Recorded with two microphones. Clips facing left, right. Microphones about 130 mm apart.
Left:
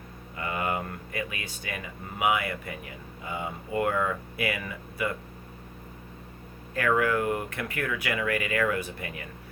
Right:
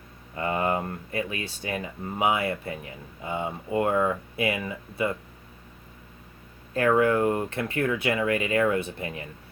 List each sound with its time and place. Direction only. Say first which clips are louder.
0.3 s speech: right 4 dB; 30° right (ahead or behind)
6.7 s speech: right 4 dB; 30° right (ahead or behind)